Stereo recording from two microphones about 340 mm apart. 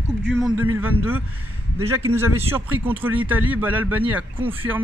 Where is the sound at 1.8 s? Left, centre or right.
Centre.